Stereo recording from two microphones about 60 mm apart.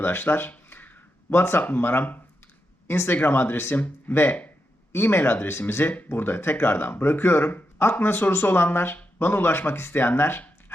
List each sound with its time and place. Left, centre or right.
0.0 s speech: left